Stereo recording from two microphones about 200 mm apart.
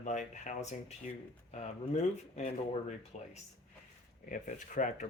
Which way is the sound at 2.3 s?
35° left (ahead or behind).